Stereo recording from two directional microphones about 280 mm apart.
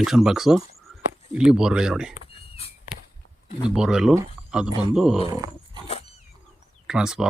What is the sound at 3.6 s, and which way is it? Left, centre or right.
Speech, centre.